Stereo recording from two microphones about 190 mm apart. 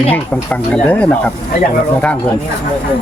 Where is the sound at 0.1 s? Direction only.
10° left (ahead or behind).